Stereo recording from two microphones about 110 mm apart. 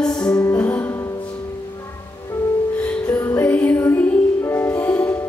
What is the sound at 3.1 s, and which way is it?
Music, 25° left (ahead or behind).